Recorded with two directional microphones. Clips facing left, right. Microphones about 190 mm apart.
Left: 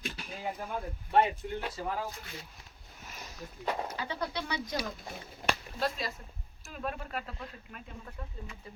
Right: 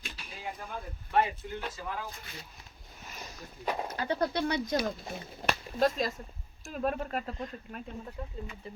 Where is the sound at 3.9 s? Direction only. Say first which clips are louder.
Right 6 dB; 50° right (ahead or behind).